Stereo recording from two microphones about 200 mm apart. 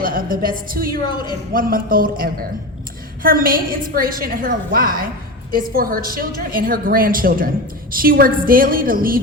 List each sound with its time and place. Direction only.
0.0 s a woman's voice: 45° right (ahead or behind)